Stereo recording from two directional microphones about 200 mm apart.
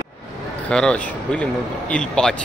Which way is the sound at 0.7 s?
5° left (ahead or behind).